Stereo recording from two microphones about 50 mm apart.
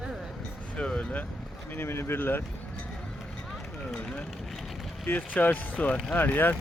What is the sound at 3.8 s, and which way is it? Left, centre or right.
Speech, left.